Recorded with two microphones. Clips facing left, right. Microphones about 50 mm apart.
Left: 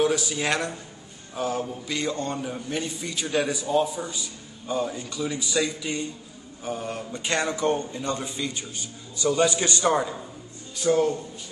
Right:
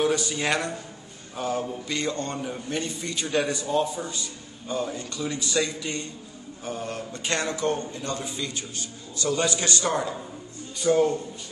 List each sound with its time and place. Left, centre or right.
0.0 s a man's voice: centre; by 8.3 s left
9.2 s a man's voice: centre